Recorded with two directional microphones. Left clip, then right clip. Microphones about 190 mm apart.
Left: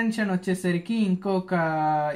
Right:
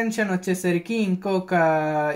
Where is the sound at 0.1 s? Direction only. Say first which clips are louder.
Right 3 dB; 20° right (ahead or behind).